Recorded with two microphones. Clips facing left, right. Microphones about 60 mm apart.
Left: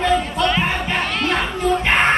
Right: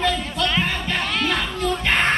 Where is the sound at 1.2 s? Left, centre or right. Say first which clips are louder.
Left 3 dB; centre.